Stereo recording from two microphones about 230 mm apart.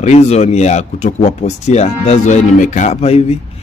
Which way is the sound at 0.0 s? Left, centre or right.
Left.